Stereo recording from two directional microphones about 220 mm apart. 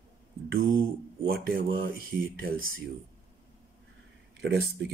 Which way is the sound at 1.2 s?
40° right (ahead or behind).